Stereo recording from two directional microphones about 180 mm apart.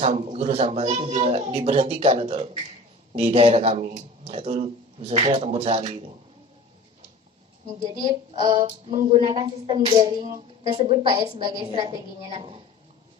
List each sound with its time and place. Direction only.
0.0 s speech: 35° right (ahead or behind)
8.3 s speech: 25° right (ahead or behind)
8.9 s speech: 40° right (ahead or behind)
9.1 s speech: 25° right (ahead or behind)